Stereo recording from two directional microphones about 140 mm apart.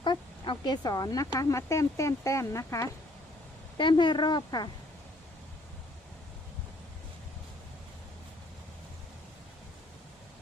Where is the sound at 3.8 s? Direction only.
35° left (ahead or behind).